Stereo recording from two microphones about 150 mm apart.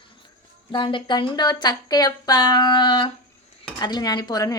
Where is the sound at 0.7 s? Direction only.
35° left (ahead or behind).